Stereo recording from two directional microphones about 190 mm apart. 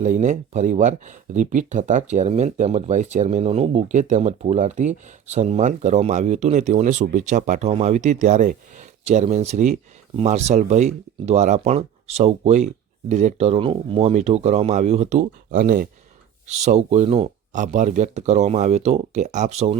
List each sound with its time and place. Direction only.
0.0 s speech: 40° right (ahead or behind)
16.5 s speech: 35° right (ahead or behind)